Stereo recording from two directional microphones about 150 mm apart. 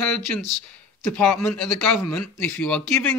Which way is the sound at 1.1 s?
5° left (ahead or behind).